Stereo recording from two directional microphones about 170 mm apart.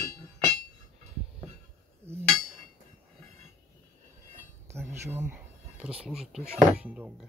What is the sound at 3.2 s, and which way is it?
Train, 40° right (ahead or behind).